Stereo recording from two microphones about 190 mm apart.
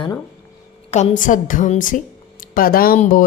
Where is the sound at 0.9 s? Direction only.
35° left (ahead or behind).